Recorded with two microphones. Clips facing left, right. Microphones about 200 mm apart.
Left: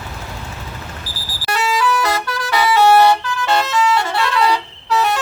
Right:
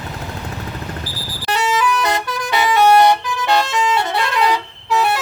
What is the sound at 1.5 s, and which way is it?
Vehicle, 20° right (ahead or behind).